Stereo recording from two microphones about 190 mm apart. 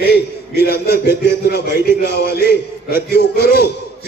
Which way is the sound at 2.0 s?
60° left (ahead or behind).